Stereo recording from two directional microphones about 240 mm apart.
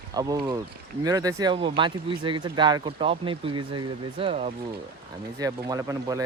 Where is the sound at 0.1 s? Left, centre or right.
Centre.